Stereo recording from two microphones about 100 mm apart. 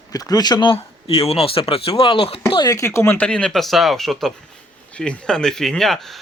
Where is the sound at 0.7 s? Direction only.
70° left (ahead or behind).